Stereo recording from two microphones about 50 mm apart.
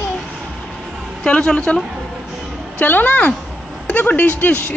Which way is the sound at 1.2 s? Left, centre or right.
Centre.